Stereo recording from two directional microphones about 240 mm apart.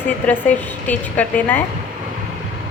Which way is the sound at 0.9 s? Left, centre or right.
Centre.